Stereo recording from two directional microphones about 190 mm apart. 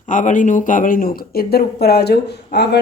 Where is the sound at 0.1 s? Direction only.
40° left (ahead or behind).